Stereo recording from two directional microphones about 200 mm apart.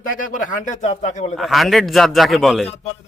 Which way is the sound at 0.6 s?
35° left (ahead or behind).